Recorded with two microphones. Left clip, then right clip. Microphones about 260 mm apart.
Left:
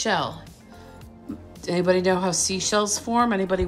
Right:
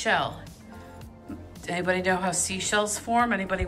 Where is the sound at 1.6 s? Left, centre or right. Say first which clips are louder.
Left 5 dB; centre.